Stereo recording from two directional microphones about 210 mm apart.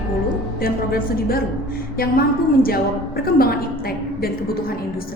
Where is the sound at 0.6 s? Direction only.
45° left (ahead or behind).